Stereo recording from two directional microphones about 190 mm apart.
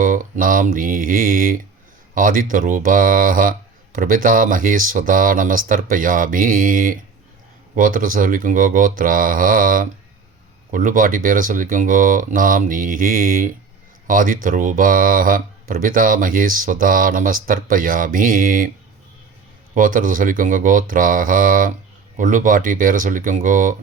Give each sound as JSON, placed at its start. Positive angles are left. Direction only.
{"t": 0.0, "sound": "speech", "side_deg": -45}
{"t": 19.7, "sound": "speech", "side_deg": -45}